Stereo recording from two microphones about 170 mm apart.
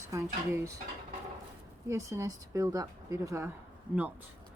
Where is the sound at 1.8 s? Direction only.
20° right (ahead or behind).